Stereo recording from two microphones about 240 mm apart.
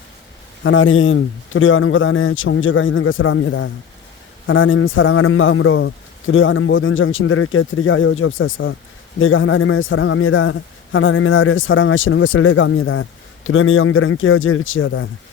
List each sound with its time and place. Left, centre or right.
0.6 s a man's voice: left